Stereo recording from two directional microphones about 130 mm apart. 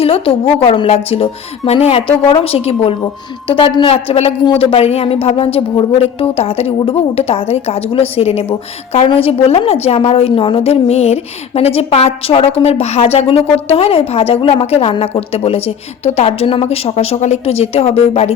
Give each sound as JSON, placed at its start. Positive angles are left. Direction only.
{"t": 0.0, "sound": "speech", "side_deg": 45}